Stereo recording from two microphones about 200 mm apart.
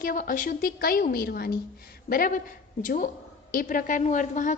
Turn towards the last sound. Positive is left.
turn(degrees=40)  # may be behind; listen again after turning